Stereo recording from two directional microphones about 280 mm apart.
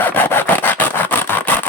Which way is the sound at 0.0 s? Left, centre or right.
Centre.